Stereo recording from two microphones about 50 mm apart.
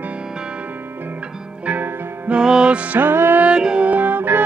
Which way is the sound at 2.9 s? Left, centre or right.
Right.